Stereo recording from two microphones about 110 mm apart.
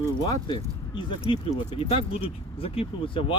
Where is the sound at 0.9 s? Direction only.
50° left (ahead or behind).